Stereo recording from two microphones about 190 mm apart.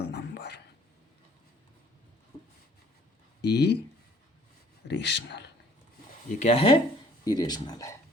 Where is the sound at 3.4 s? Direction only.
60° left (ahead or behind).